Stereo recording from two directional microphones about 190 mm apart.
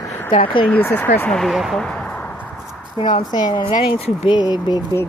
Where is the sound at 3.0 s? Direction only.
25° left (ahead or behind).